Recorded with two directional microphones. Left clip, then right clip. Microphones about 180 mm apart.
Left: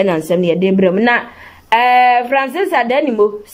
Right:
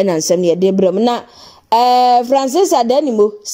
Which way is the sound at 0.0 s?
50° right (ahead or behind).